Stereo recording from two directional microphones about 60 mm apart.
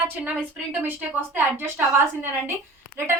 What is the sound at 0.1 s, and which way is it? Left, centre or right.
A woman's voice, right.